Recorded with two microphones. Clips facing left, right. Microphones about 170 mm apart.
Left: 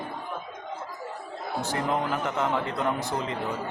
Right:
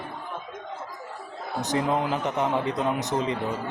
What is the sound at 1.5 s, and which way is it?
A man's voice, 20° right (ahead or behind).